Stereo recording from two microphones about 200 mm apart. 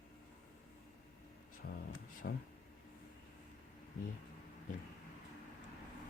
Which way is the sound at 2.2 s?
50° left (ahead or behind).